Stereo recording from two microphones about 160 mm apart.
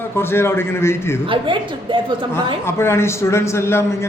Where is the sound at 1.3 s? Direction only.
30° right (ahead or behind).